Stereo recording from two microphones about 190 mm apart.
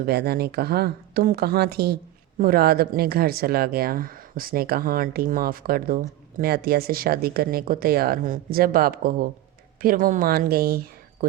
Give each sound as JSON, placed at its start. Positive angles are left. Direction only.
{"t": 0.0, "sound": "speech", "side_deg": -55}